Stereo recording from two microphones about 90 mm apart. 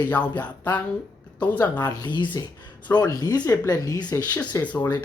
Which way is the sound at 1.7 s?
50° left (ahead or behind).